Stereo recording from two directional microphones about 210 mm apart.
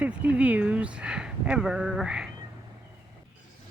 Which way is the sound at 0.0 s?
5° right (ahead or behind).